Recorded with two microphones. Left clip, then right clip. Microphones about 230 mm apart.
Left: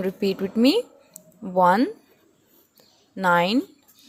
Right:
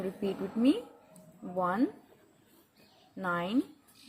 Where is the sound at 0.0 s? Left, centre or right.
Left.